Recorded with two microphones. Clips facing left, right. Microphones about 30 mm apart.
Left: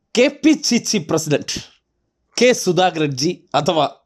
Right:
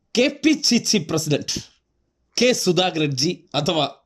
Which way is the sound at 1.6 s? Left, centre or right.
Left.